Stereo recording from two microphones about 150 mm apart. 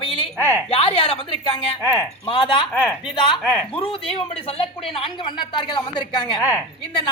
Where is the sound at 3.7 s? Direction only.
40° left (ahead or behind).